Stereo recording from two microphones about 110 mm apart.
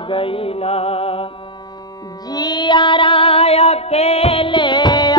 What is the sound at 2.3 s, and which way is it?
Music, 40° left (ahead or behind).